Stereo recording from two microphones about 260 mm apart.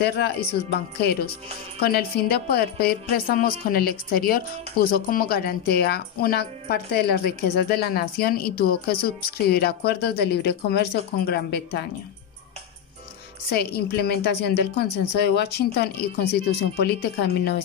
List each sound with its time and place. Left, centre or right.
0.0 s a woman's voice: left
13.5 s a woman's voice: left